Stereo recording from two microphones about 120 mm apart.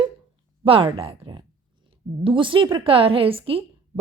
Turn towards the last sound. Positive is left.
turn(degrees=-50)  # may be behind; listen again after turning